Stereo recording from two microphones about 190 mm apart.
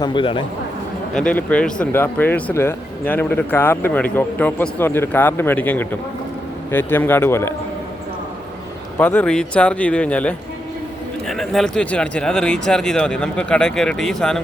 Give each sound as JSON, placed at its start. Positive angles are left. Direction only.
{"t": 0.0, "sound": "speech", "side_deg": 25}
{"t": 1.1, "sound": "speech", "side_deg": 5}
{"t": 9.0, "sound": "speech", "side_deg": 10}